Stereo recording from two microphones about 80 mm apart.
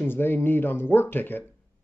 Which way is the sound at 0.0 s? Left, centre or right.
Left.